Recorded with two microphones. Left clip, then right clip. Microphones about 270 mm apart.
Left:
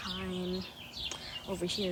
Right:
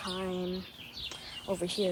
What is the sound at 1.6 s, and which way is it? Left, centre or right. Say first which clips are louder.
Speech: left 1 dB; centre.